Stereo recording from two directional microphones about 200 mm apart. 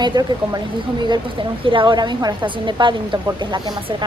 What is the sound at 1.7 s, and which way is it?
A woman's voice, 25° right (ahead or behind).